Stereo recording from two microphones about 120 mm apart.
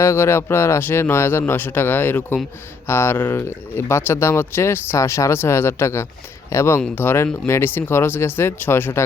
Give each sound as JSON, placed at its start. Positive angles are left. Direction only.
{"t": 0.0, "sound": "speech", "side_deg": 20}